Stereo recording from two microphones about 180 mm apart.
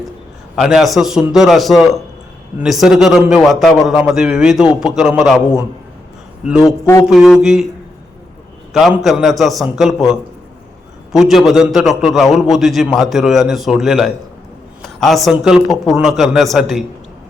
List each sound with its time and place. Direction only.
0.5 s a man's voice: centre (ahead or behind)
6.4 s a man's voice: 5° right (ahead or behind)
6.7 s a man's voice: 15° left (ahead or behind)
7.1 s a man's voice: centre (ahead or behind)
9.0 s a man's voice: centre (ahead or behind)